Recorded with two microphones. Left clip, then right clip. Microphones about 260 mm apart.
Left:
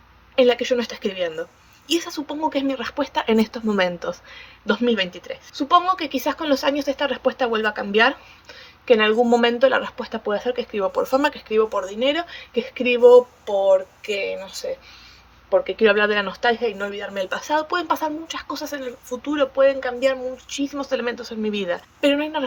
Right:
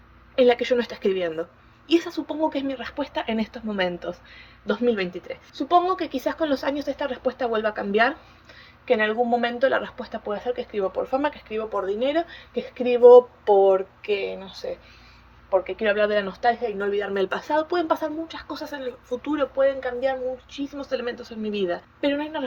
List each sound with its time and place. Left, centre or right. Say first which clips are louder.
0.3 s a woman's voice: left 1 dB; centre
8.9 s a woman's voice: left 5 dB; centre
11.7 s a woman's voice: left 2 dB; centre
15.7 s a woman's voice: left 5 dB; left